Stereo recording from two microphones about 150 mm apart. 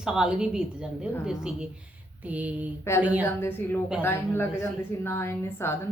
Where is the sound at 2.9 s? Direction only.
20° left (ahead or behind).